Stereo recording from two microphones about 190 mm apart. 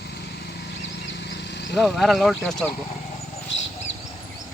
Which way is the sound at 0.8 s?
70° left (ahead or behind).